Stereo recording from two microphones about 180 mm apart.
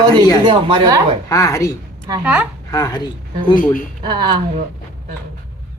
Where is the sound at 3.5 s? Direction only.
50° left (ahead or behind).